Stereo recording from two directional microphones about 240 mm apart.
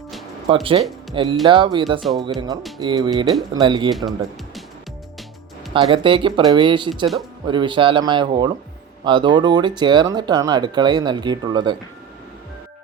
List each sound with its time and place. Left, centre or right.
0.4 s speech: right
5.7 s speech: right